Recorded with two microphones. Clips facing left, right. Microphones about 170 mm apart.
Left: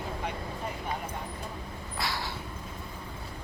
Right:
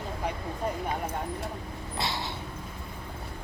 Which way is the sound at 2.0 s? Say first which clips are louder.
Right 1 dB; 25° right (ahead or behind).